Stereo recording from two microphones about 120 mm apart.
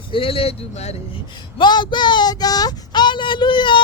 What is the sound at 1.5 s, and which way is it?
Speech, 40° left (ahead or behind).